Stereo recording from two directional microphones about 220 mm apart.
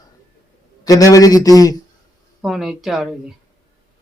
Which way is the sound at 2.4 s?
Centre (ahead or behind).